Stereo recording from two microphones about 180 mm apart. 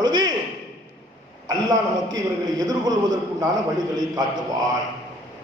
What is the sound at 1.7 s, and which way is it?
A man's voice, 20° right (ahead or behind).